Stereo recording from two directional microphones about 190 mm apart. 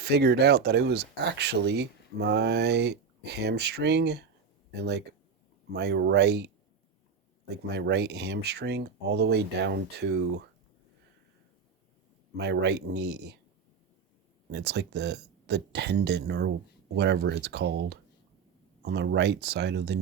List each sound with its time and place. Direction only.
0.0 s speech: 60° right (ahead or behind)
12.4 s speech: 65° right (ahead or behind)
14.5 s speech: 60° right (ahead or behind)